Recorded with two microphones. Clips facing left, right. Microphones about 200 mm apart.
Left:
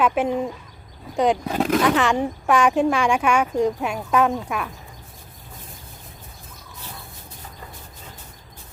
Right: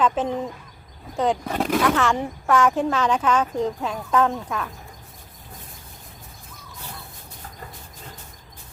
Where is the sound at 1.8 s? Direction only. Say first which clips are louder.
Left 2 dB; 15° left (ahead or behind).